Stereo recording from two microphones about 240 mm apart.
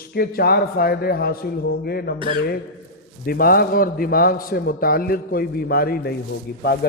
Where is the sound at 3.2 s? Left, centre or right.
Left.